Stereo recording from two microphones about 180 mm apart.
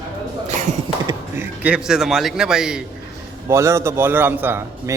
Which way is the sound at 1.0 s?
10° right (ahead or behind).